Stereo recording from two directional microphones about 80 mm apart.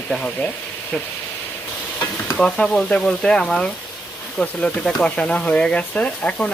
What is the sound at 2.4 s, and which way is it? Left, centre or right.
Speech, centre.